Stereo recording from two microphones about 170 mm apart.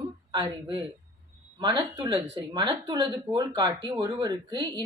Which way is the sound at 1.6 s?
25° right (ahead or behind).